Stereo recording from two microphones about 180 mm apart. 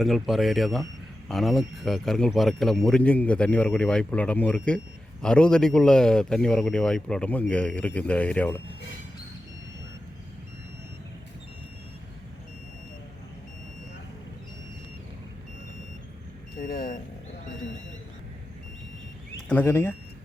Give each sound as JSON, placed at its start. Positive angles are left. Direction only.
{"t": 0.0, "sound": "speech", "side_deg": 0}
{"t": 16.6, "sound": "vehicle", "side_deg": 55}
{"t": 19.5, "sound": "speech", "side_deg": 10}